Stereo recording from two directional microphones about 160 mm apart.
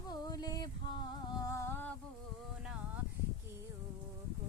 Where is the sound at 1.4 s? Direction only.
20° left (ahead or behind).